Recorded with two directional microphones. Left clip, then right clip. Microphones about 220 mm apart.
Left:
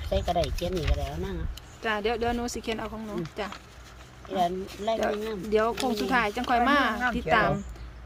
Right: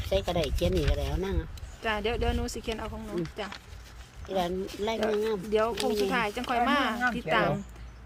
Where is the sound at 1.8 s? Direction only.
5° left (ahead or behind).